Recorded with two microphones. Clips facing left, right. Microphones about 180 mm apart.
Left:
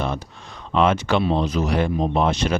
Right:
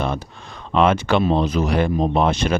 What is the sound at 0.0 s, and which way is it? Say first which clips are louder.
Speech: right 2 dB; 55° right (ahead or behind).